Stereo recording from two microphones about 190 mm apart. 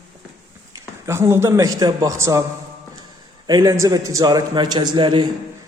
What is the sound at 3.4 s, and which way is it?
A man's voice, 15° right (ahead or behind).